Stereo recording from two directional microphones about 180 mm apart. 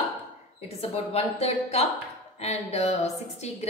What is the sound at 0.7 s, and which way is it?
A woman's voice, 35° left (ahead or behind).